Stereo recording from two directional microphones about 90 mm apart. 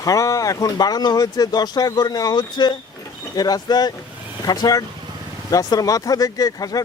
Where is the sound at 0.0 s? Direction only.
40° left (ahead or behind).